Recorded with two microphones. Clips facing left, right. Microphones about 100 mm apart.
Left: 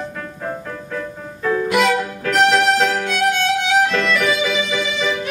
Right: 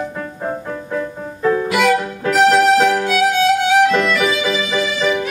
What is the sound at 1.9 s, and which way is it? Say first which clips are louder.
Music: right 2 dB; 25° right (ahead or behind).